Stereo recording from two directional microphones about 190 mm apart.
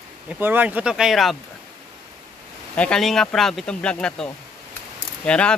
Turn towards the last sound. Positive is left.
turn(degrees=5)  # may be behind; listen again after turning